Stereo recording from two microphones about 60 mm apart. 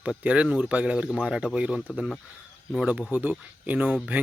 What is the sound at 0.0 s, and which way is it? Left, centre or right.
Speech, centre.